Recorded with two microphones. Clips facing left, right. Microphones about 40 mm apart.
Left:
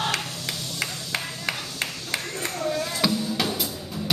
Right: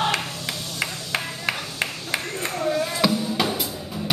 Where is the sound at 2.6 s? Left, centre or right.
Centre.